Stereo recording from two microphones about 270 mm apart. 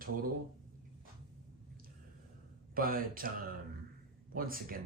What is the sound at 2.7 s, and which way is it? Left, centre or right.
Speech, right.